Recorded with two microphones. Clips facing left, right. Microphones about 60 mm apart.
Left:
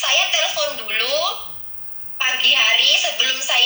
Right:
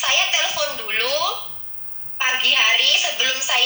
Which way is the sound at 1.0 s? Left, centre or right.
Right.